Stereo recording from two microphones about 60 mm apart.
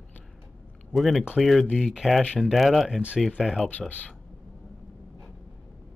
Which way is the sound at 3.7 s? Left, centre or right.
Left.